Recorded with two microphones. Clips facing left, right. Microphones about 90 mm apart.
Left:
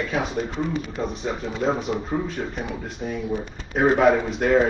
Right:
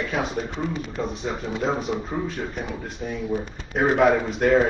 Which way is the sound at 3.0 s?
20° left (ahead or behind).